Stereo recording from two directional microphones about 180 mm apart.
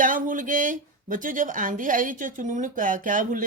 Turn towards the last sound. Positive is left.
turn(degrees=-50)  # may be behind; listen again after turning